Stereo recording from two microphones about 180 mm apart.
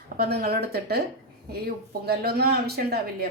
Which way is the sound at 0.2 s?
60° right (ahead or behind).